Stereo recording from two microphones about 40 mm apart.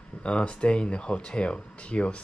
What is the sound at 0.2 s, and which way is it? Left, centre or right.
Speech, left.